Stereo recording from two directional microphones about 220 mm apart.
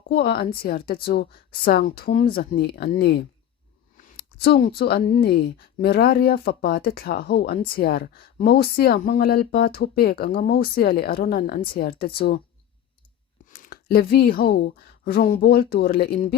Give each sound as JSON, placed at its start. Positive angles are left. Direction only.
{"t": 0.1, "sound": "speech", "side_deg": 45}
{"t": 13.5, "sound": "speech", "side_deg": 40}